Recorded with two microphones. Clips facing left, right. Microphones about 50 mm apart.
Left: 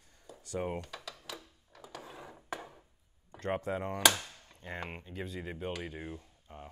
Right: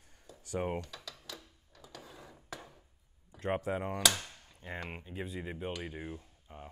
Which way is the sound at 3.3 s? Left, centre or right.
Centre.